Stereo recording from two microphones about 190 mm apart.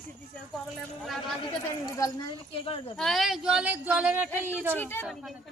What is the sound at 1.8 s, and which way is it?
Speech, 20° left (ahead or behind).